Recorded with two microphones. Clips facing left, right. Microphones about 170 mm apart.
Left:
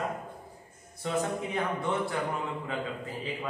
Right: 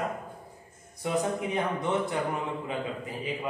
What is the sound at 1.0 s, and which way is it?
Speech, 15° right (ahead or behind).